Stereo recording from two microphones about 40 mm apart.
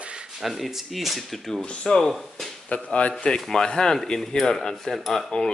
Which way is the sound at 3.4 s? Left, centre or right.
Centre.